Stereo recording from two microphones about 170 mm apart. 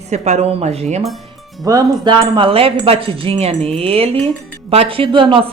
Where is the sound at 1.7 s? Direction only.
25° right (ahead or behind).